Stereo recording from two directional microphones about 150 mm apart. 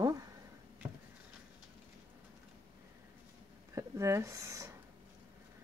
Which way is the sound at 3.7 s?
20° right (ahead or behind).